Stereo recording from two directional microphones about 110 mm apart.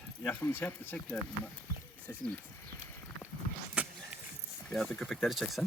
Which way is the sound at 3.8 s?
10° right (ahead or behind).